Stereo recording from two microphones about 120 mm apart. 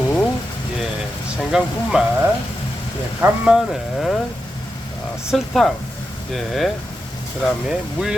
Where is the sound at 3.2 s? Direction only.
20° right (ahead or behind).